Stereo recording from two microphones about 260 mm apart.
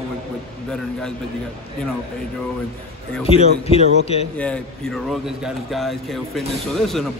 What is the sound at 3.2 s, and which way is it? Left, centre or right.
A man's voice, left.